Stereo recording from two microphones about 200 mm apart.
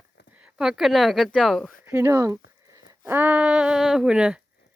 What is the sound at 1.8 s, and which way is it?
Speech, 10° right (ahead or behind).